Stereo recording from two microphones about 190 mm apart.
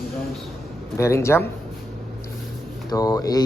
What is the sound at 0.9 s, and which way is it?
Speech, 15° left (ahead or behind).